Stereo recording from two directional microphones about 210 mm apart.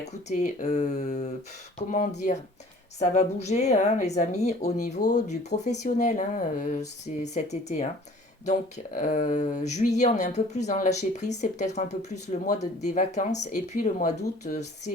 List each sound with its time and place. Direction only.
0.3 s speech: 35° left (ahead or behind)